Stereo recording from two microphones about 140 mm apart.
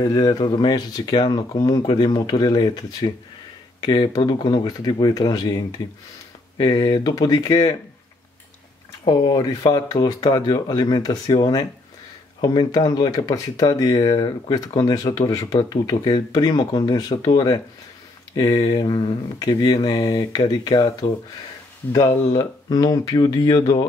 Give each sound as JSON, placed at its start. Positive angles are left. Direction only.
{"t": 0.0, "sound": "speech", "side_deg": 30}
{"t": 9.0, "sound": "speech", "side_deg": 30}